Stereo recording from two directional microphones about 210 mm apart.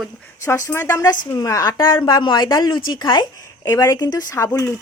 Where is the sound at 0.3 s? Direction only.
15° left (ahead or behind).